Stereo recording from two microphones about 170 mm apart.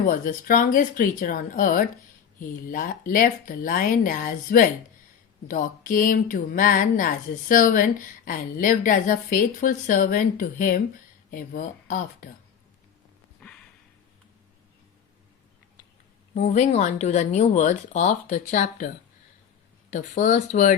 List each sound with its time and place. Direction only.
0.1 s speech: 55° left (ahead or behind)
13.4 s a sound: 5° left (ahead or behind)
16.3 s speech: 45° left (ahead or behind)